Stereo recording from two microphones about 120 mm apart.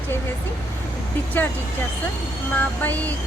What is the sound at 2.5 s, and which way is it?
Speech, 15° left (ahead or behind).